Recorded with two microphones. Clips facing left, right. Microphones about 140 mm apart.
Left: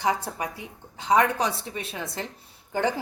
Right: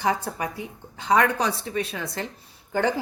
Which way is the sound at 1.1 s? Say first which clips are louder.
Right 1 dB; 5° left (ahead or behind).